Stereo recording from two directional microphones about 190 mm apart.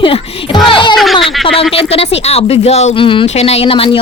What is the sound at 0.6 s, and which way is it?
Speech, 25° left (ahead or behind).